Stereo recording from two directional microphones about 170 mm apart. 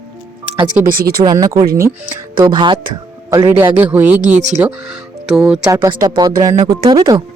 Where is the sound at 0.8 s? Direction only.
60° right (ahead or behind).